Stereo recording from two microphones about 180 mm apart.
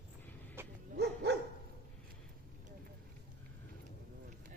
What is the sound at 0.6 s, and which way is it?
Bow-wow, 15° right (ahead or behind).